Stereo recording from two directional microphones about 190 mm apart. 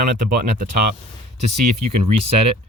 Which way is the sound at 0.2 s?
45° right (ahead or behind).